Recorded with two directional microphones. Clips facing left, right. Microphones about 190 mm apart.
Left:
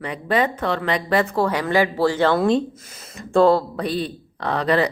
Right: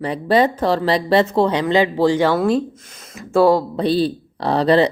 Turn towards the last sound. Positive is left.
turn(degrees=-30)  # may be behind; listen again after turning